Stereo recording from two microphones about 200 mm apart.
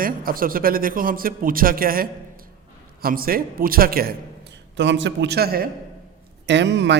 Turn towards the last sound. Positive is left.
turn(degrees=-60)  # may be behind; listen again after turning